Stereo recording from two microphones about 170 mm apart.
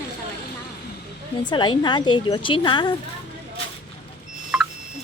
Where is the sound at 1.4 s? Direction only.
25° left (ahead or behind).